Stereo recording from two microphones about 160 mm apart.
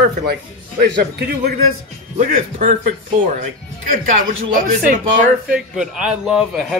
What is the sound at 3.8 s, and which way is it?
Speech, 60° right (ahead or behind).